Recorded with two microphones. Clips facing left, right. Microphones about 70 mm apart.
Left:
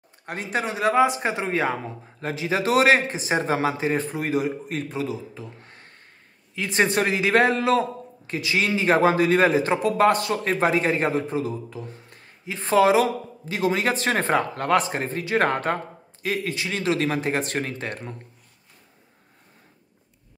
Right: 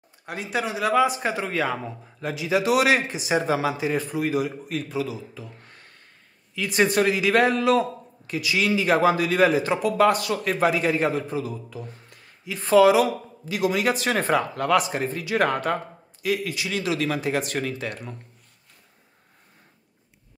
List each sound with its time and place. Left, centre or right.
0.3 s a man's voice: left
6.5 s a man's voice: left